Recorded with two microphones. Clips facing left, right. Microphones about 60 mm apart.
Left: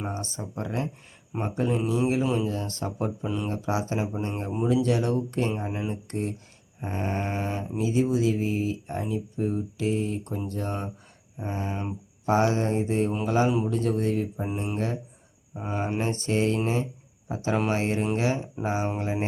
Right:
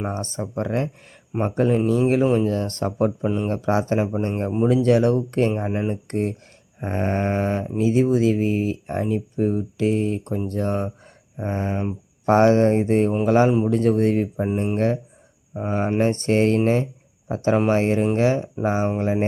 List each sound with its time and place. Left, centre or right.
0.1 s speech: right
5.5 s speech: right
12.2 s speech: right